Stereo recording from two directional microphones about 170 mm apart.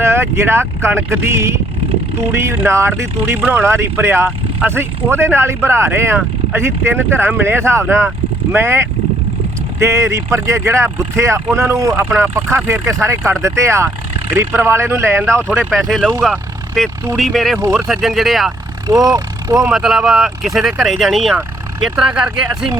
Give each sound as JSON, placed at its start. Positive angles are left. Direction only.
{"t": 0.0, "sound": "speech", "side_deg": -15}
{"t": 15.2, "sound": "speech", "side_deg": 5}
{"t": 17.6, "sound": "speech", "side_deg": -15}
{"t": 17.8, "sound": "speech", "side_deg": 0}
{"t": 18.9, "sound": "speech", "side_deg": -20}
{"t": 19.7, "sound": "speech", "side_deg": 0}